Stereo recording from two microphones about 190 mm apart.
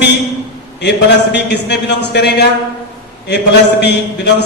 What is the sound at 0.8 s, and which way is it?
A man's voice, 65° left (ahead or behind).